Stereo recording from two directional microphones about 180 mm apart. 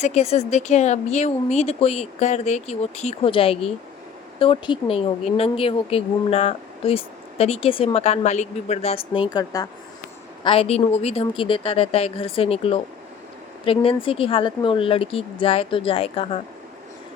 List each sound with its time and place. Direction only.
0.0 s speech: 35° left (ahead or behind); by 9.6 s 20° left (ahead or behind)
10.4 s speech: 30° left (ahead or behind)